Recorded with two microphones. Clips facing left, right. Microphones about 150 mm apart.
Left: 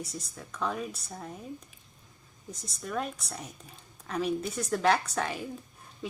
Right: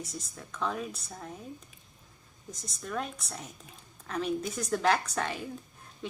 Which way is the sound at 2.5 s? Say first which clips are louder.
Left 1 dB; 5° left (ahead or behind).